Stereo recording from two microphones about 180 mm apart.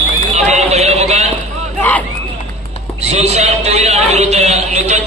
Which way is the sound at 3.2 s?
35° right (ahead or behind).